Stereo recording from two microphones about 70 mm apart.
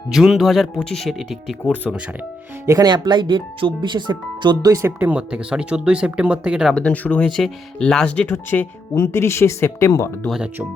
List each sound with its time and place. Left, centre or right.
0.1 s speech: centre
0.8 s speech: centre
2.6 s speech: right
4.9 s speech: right
5.3 s speech: centre
6.7 s speech: left
7.3 s speech: centre
8.3 s speech: left